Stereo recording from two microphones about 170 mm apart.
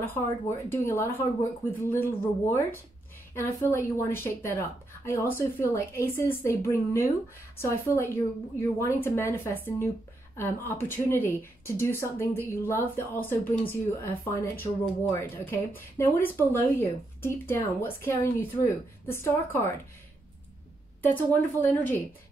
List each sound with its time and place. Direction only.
0.0 s a woman's voice: 15° left (ahead or behind)
21.0 s a woman's voice: 10° left (ahead or behind)